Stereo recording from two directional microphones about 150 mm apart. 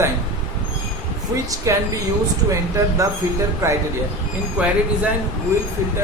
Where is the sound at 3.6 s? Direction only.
20° right (ahead or behind).